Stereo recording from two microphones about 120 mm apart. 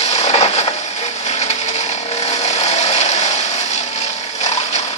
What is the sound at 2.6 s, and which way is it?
Wood, 65° left (ahead or behind).